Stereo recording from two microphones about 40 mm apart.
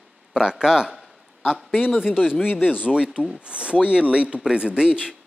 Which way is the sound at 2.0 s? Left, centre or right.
Centre.